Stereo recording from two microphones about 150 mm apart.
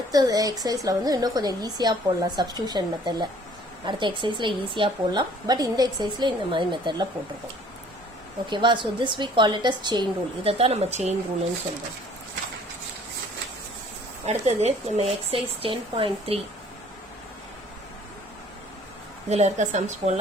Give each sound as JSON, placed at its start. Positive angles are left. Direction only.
{"t": 0.1, "sound": "a woman's voice", "side_deg": -25}
{"t": 8.4, "sound": "a woman's voice", "side_deg": -30}
{"t": 14.3, "sound": "a woman's voice", "side_deg": -45}
{"t": 19.3, "sound": "speech", "side_deg": -50}